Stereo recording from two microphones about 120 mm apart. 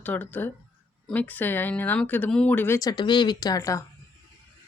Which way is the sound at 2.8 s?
35° left (ahead or behind).